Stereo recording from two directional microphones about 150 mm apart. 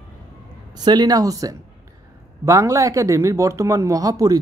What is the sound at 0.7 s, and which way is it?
Speech, 25° right (ahead or behind).